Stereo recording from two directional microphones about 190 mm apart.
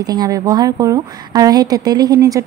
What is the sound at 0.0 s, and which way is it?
A woman's voice, 20° right (ahead or behind).